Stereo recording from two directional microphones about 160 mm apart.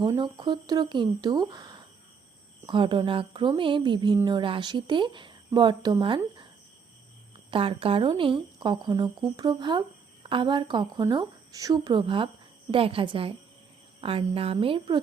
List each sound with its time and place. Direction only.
0.0 s a woman's voice: 25° right (ahead or behind)
7.5 s a woman's voice: 35° right (ahead or behind)